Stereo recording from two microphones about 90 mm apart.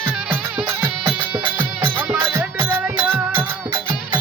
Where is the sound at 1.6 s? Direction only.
20° right (ahead or behind).